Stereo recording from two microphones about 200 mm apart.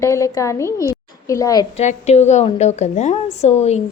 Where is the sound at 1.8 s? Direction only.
35° left (ahead or behind).